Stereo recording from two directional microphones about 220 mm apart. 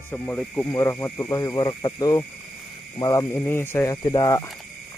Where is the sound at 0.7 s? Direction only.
15° left (ahead or behind).